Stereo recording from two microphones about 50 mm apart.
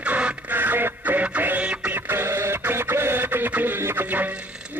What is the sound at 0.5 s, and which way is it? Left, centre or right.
Radio, right.